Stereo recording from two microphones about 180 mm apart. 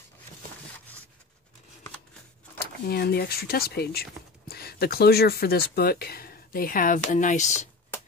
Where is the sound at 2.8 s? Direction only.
60° left (ahead or behind); by 7.5 s 45° left (ahead or behind).